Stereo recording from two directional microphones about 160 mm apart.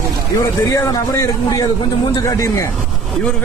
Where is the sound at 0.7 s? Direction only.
20° left (ahead or behind).